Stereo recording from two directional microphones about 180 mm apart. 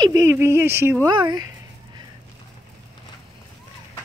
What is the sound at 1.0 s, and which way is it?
Speech, 25° right (ahead or behind).